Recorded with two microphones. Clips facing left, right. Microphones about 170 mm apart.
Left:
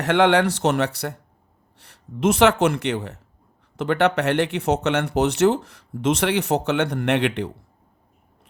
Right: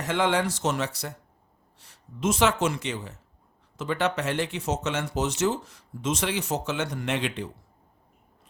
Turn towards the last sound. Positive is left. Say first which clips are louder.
# left 8 dB
turn(degrees=65)  # may be behind; listen again after turning